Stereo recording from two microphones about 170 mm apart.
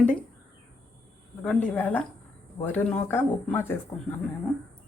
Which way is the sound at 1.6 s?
10° left (ahead or behind).